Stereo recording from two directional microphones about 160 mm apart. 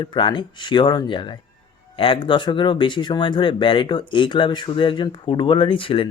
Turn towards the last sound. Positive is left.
turn(degrees=35)  # may be behind; listen again after turning